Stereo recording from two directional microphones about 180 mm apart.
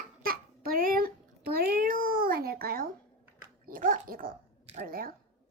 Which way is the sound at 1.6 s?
55° right (ahead or behind).